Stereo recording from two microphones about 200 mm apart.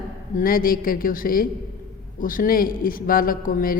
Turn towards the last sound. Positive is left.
turn(degrees=45)  # may be behind; listen again after turning